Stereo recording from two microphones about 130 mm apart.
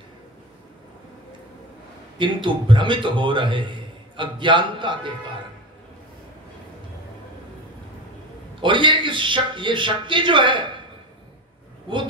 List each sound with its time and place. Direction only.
2.1 s a man's voice: 40° right (ahead or behind)
8.5 s a man's voice: 40° right (ahead or behind)